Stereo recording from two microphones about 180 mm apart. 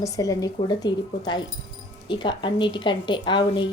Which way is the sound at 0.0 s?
20° left (ahead or behind).